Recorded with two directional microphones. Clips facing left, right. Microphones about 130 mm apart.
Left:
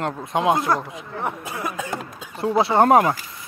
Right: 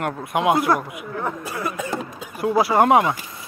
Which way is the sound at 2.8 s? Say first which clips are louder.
Left 1 dB; 40° left (ahead or behind).